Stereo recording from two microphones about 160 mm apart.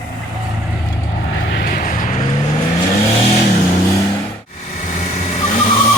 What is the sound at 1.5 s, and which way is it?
Vehicle, 65° left (ahead or behind).